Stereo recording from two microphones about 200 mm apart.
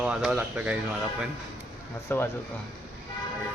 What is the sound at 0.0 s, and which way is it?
Speech, 5° right (ahead or behind).